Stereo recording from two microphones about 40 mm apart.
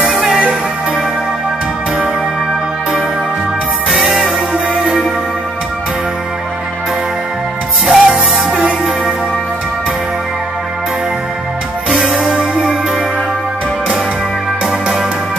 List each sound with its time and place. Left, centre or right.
0.2 s music: centre
3.9 s music: centre
7.8 s music: centre
12.0 s music: centre